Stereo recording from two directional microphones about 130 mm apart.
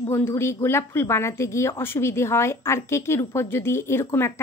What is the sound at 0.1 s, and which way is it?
Speech, 20° left (ahead or behind).